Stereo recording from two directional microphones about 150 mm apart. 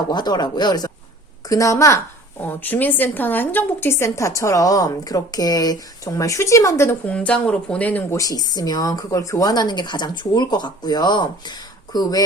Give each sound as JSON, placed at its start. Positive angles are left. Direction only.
{"t": 0.1, "sound": "a woman's voice", "side_deg": 30}
{"t": 7.1, "sound": "speech", "side_deg": 10}
{"t": 8.2, "sound": "a woman's voice", "side_deg": 25}